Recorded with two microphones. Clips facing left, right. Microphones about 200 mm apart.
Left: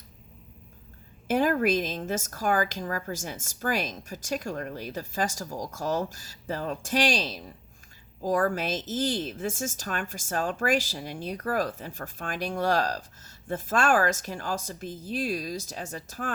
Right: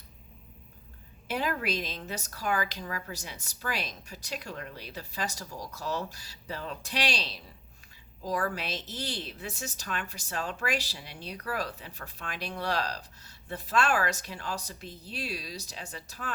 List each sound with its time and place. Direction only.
1.3 s a woman's voice: 45° left (ahead or behind)